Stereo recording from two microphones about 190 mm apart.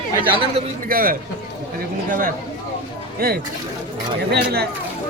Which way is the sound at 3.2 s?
50° right (ahead or behind).